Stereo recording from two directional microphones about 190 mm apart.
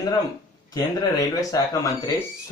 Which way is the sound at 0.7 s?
20° left (ahead or behind).